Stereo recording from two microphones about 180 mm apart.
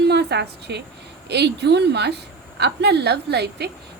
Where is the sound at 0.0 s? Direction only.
65° right (ahead or behind).